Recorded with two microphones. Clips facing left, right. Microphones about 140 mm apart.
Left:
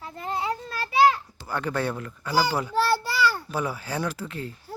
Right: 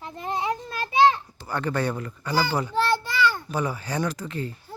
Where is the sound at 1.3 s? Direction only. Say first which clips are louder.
Right 1 dB; 5° left (ahead or behind).